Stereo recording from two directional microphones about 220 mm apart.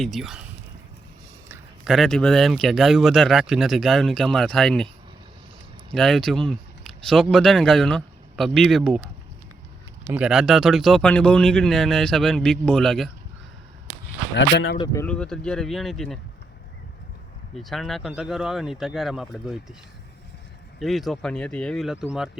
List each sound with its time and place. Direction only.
0.0 s a man's voice: centre (ahead or behind)
1.5 s a man's voice: centre (ahead or behind)
5.9 s speech: centre (ahead or behind)
10.1 s a man's voice: 5° right (ahead or behind)
14.3 s speech: 50° left (ahead or behind)
15.0 s a man's voice: 5° left (ahead or behind)
17.5 s a man's voice: centre (ahead or behind)
20.7 s a man's voice: centre (ahead or behind)